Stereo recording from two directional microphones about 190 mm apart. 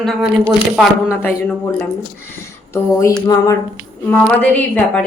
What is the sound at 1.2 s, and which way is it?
A woman's voice, 10° left (ahead or behind).